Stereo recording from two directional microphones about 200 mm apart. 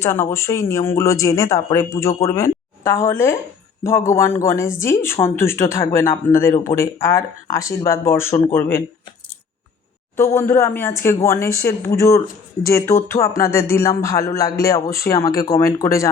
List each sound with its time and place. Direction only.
0.0 s speech: 10° left (ahead or behind)
10.2 s speech: 15° left (ahead or behind)